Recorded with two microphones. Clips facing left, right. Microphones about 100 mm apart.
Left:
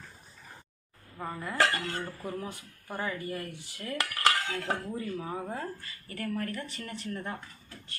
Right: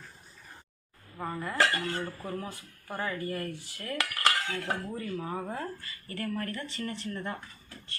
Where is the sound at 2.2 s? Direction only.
15° left (ahead or behind).